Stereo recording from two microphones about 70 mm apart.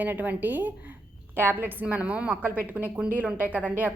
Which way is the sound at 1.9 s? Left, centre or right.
Centre.